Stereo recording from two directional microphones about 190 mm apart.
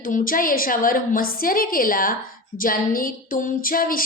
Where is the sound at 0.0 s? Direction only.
45° left (ahead or behind).